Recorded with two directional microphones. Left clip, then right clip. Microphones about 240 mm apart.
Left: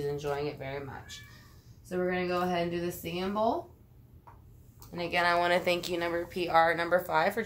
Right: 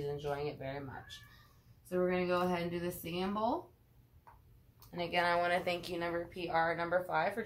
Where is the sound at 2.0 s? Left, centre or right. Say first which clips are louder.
Left 2 dB; centre.